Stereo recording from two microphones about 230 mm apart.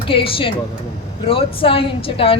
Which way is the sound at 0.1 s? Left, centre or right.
Left.